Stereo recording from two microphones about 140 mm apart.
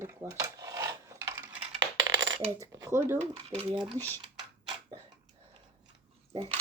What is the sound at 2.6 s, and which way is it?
Speech, 20° right (ahead or behind).